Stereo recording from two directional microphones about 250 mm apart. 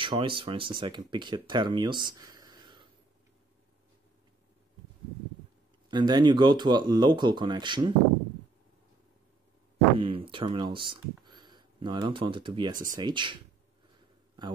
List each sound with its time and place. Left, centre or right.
0.0 s speech: right
5.9 s speech: centre
9.9 s speech: right